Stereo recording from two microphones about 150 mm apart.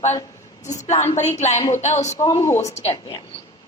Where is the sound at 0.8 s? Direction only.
50° left (ahead or behind).